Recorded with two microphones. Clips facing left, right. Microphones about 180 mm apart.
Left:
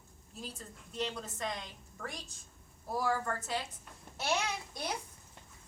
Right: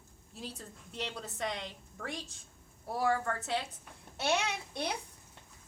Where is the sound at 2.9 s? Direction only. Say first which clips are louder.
Right 2 dB; 65° right (ahead or behind).